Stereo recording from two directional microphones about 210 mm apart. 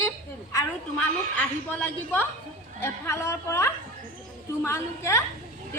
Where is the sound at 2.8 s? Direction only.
10° left (ahead or behind).